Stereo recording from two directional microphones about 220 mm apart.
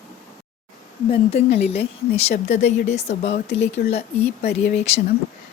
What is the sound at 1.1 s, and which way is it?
Speech, 30° left (ahead or behind).